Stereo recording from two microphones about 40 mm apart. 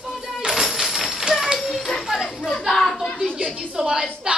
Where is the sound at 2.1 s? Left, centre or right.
Centre.